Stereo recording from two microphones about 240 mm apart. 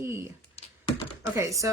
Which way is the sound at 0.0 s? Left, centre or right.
Centre.